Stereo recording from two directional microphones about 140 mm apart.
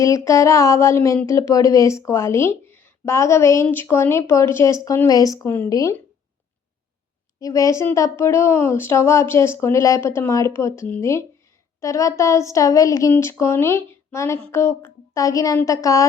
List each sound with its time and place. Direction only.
0.0 s speech: 20° left (ahead or behind)
7.3 s speech: 25° left (ahead or behind)